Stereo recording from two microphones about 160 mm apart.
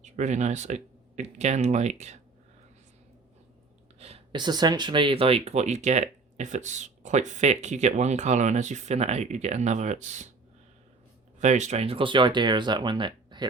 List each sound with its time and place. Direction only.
0.0 s speech: 50° right (ahead or behind)
4.0 s a sound: 40° right (ahead or behind)
4.4 s speech: 25° right (ahead or behind); by 10.2 s 45° right (ahead or behind)
11.3 s speech: 50° right (ahead or behind); by 13.4 s 30° right (ahead or behind)